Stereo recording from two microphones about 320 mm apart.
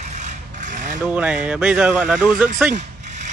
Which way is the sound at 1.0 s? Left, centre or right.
Centre.